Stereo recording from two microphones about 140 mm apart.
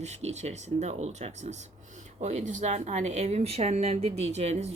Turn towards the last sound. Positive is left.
turn(degrees=-50)  # may be behind; listen again after turning